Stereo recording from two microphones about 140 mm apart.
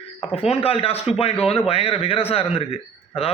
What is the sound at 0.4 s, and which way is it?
A man's voice, 45° left (ahead or behind).